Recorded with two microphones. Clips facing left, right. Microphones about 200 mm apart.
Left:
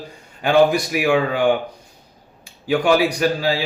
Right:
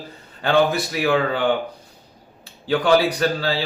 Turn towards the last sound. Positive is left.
turn(degrees=10)  # may be behind; listen again after turning